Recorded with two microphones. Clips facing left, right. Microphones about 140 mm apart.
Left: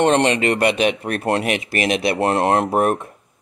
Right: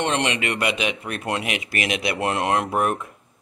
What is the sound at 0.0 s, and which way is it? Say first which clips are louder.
Speech: left 8 dB; 40° left (ahead or behind).